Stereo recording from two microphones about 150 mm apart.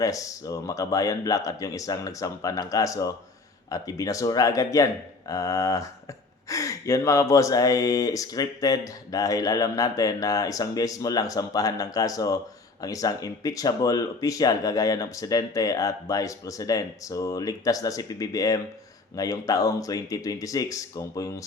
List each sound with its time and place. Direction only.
0.0 s speech: 20° left (ahead or behind)